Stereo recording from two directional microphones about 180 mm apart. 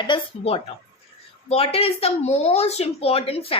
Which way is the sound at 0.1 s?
35° left (ahead or behind).